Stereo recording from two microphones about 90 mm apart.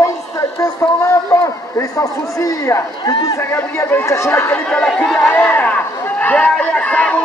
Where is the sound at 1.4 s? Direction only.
35° left (ahead or behind).